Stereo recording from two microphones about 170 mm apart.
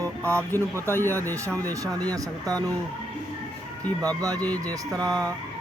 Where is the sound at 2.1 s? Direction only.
20° right (ahead or behind).